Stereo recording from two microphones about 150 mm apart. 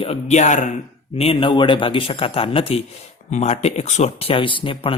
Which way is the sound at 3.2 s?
50° left (ahead or behind).